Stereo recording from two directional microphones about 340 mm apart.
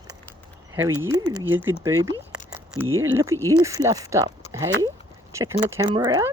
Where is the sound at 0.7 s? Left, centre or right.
Centre.